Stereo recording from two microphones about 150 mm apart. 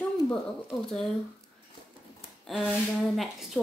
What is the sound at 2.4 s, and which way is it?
Speech, 5° right (ahead or behind).